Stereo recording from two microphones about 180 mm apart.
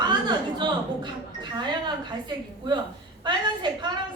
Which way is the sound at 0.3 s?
25° right (ahead or behind).